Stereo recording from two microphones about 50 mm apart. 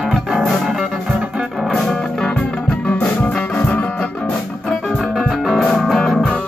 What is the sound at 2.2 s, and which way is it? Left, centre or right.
Music, left.